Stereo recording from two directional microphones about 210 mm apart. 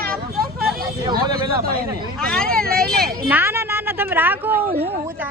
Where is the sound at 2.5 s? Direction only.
45° right (ahead or behind).